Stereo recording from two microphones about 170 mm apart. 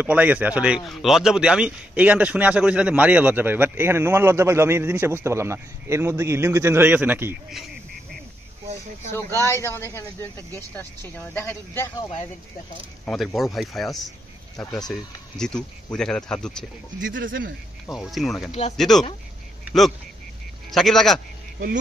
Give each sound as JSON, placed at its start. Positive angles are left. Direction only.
{"t": 0.0, "sound": "speech", "side_deg": -10}
{"t": 9.1, "sound": "speech", "side_deg": 15}
{"t": 13.0, "sound": "speech", "side_deg": 0}
{"t": 14.6, "sound": "speech", "side_deg": 20}
{"t": 14.9, "sound": "speech", "side_deg": 5}
{"t": 17.9, "sound": "speech", "side_deg": 0}
{"t": 19.6, "sound": "a sound", "side_deg": 0}
{"t": 20.7, "sound": "speech", "side_deg": 0}